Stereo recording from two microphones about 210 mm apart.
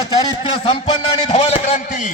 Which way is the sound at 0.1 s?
25° left (ahead or behind).